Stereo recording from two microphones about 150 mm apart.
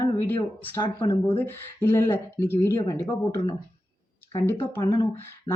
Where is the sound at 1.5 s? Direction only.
15° left (ahead or behind).